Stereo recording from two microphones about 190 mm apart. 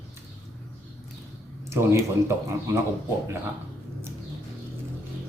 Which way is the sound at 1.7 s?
15° right (ahead or behind).